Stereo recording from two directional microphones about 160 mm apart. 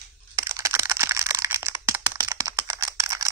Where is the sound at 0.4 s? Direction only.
20° right (ahead or behind).